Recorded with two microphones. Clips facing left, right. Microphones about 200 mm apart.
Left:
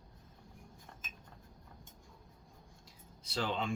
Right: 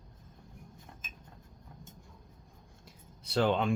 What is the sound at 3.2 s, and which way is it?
Speech, 60° right (ahead or behind).